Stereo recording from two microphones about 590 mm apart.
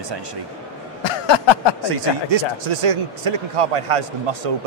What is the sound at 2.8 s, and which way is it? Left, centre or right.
Speech, right.